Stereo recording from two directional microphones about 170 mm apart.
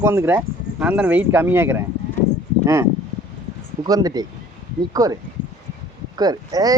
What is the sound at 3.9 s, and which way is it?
Speech, 20° right (ahead or behind).